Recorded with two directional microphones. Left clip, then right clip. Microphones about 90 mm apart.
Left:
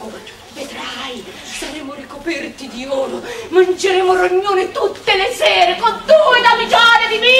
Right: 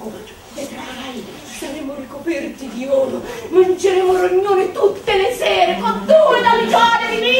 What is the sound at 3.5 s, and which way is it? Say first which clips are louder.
A woman's voice: even; 40° left (ahead or behind).